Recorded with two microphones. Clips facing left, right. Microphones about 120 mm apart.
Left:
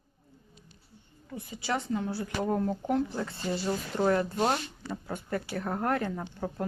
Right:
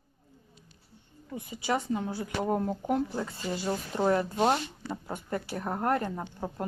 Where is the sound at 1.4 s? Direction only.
15° right (ahead or behind).